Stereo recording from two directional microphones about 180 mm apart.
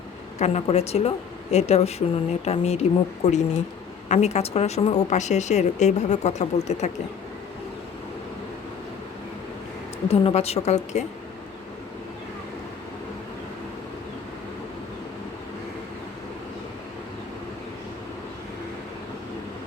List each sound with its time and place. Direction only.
0.3 s speech: 35° left (ahead or behind)
10.1 s speech: 35° left (ahead or behind)